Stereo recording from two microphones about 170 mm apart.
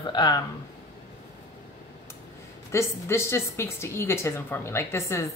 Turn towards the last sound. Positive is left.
turn(degrees=15)  # may be behind; listen again after turning